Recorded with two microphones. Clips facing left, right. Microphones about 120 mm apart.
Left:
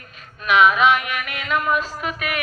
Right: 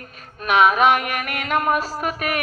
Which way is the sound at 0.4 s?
40° right (ahead or behind).